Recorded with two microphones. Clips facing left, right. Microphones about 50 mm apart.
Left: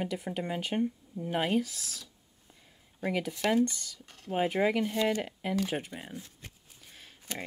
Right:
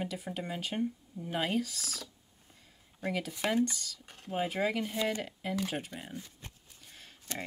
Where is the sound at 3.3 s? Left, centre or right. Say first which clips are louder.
Left 3 dB; centre.